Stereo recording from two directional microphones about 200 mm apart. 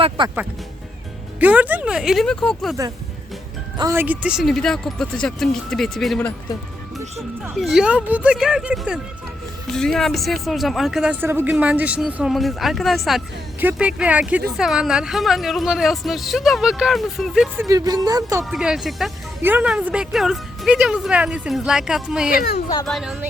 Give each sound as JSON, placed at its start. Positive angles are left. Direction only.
{"t": 0.2, "sound": "speech", "side_deg": -25}
{"t": 1.4, "sound": "a woman's voice", "side_deg": -10}
{"t": 3.8, "sound": "a woman's voice", "side_deg": -15}
{"t": 7.5, "sound": "a woman's voice", "side_deg": 0}
{"t": 17.7, "sound": "speech", "side_deg": -20}
{"t": 18.5, "sound": "a woman's voice", "side_deg": 0}